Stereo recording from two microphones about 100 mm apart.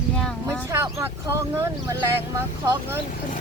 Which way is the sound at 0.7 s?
30° right (ahead or behind).